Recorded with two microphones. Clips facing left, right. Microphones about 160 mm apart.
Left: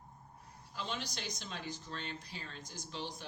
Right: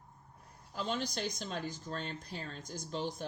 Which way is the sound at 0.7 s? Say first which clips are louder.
Right 6 dB; 50° right (ahead or behind).